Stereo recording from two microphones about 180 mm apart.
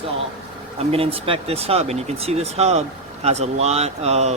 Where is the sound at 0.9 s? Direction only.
35° right (ahead or behind).